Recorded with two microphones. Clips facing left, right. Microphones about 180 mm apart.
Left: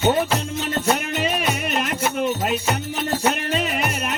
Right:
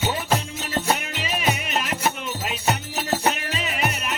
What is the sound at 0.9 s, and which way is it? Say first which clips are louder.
Music: left 6 dB; 50° left (ahead or behind).